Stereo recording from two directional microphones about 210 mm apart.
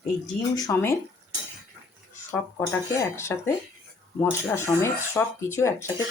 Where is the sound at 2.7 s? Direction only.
10° left (ahead or behind).